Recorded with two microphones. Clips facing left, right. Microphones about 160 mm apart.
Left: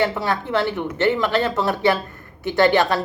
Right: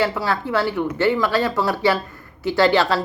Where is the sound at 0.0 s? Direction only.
20° left (ahead or behind).